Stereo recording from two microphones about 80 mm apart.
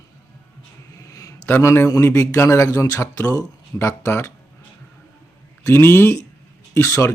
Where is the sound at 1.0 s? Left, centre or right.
Left.